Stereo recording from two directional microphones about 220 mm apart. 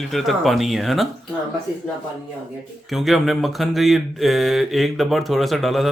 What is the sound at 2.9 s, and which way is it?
Speech, centre (ahead or behind).